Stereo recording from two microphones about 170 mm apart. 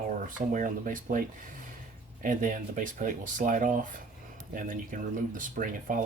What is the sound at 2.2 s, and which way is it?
Speech, 50° right (ahead or behind).